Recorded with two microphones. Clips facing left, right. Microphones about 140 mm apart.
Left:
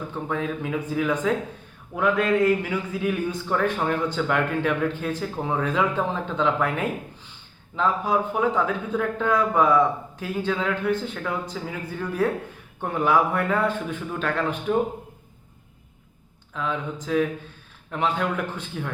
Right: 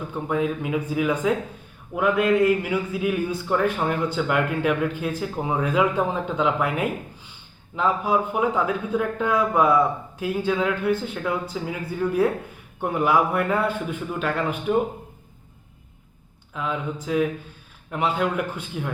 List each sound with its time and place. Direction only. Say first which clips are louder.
0.1 s speech: right 5 dB; 10° right (ahead or behind)
16.6 s speech: right 1 dB; 10° right (ahead or behind)